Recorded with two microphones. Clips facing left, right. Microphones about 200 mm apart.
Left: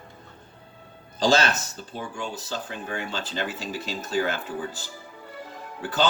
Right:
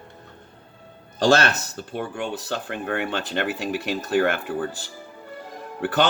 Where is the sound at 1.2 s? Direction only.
65° right (ahead or behind).